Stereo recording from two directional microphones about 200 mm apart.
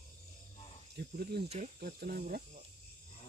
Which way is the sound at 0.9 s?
50° right (ahead or behind).